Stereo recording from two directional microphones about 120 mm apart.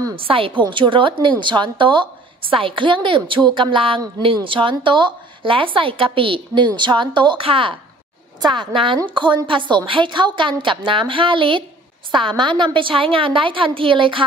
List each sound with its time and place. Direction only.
0.1 s a woman's voice: 50° right (ahead or behind)